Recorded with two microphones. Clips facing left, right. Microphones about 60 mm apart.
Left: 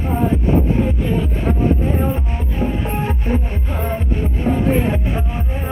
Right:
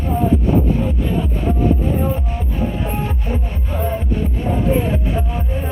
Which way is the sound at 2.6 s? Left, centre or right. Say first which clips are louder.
Left 1 dB; left.